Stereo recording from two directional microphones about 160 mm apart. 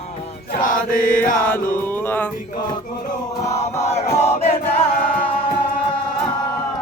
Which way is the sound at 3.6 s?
45° left (ahead or behind).